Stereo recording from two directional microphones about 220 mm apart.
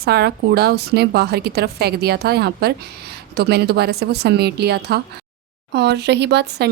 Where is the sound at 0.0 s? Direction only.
45° right (ahead or behind).